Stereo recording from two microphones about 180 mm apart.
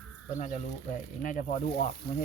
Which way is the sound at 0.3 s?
45° left (ahead or behind).